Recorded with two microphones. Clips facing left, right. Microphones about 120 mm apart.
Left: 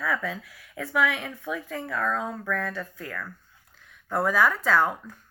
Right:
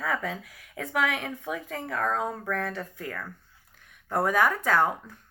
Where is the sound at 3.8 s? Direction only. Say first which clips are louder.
Even; 55° right (ahead or behind).